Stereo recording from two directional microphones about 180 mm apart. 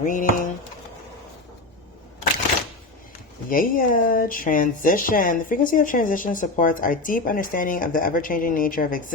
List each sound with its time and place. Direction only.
0.0 s speech: 45° left (ahead or behind)
3.5 s speech: 50° left (ahead or behind)